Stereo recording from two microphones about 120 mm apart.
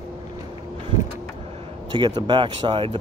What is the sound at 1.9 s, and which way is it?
Speech, 40° right (ahead or behind).